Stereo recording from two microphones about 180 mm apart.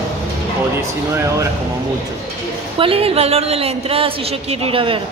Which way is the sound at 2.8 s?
30° right (ahead or behind).